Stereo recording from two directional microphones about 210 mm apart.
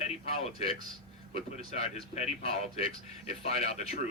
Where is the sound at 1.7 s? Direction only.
30° left (ahead or behind).